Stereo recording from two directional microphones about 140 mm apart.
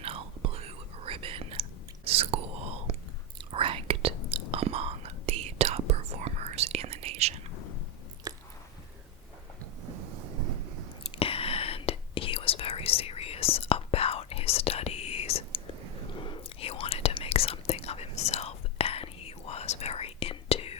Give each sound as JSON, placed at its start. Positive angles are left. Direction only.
{"t": 0.0, "sound": "whispering", "side_deg": -45}
{"t": 8.3, "sound": "chewing", "side_deg": -25}
{"t": 11.2, "sound": "whispering", "side_deg": 45}